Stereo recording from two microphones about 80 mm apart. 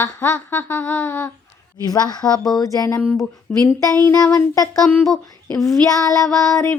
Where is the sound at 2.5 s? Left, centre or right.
Left.